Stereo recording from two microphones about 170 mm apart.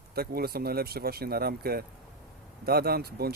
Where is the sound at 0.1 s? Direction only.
65° right (ahead or behind).